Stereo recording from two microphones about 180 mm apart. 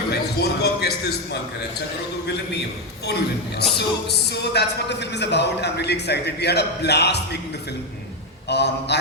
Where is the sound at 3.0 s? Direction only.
65° left (ahead or behind).